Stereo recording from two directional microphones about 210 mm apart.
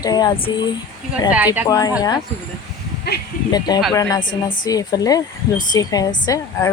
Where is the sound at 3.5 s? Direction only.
20° left (ahead or behind).